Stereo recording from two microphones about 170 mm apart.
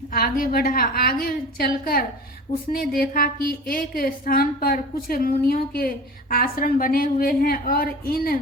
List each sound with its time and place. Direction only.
0.1 s a woman's voice: 55° left (ahead or behind)